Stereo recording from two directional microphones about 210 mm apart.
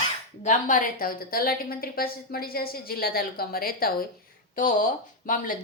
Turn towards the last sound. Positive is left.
turn(degrees=40)  # may be behind; listen again after turning